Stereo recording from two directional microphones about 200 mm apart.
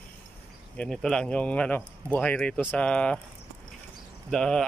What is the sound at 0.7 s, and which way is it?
Speech, 5° left (ahead or behind).